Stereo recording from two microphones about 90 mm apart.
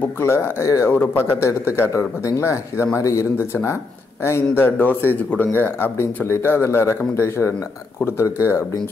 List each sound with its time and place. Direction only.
0.2 s speech: 30° left (ahead or behind)